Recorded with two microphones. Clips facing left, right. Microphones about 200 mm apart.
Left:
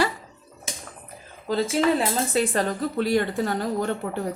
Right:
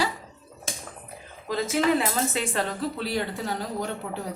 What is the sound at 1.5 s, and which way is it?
A woman's voice, 30° left (ahead or behind).